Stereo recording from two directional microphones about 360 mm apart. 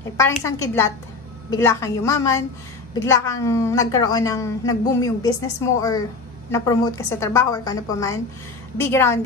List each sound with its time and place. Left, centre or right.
0.0 s a woman's voice: centre